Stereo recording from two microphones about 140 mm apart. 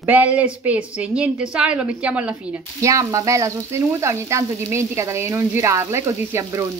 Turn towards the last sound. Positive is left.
turn(degrees=-20)  # may be behind; listen again after turning